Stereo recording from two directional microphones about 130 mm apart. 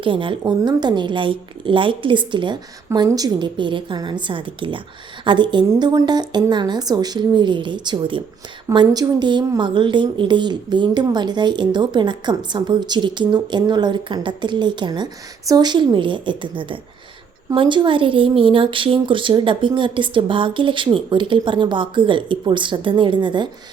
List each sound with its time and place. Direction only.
0.0 s a woman's voice: 40° right (ahead or behind)